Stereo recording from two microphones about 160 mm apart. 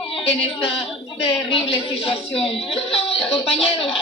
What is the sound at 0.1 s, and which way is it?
A woman's voice, 35° left (ahead or behind).